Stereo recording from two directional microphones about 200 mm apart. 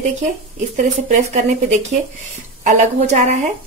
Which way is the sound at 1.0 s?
35° right (ahead or behind).